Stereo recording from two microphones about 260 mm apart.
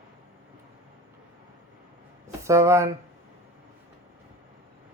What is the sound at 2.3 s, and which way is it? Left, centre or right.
Speech, centre.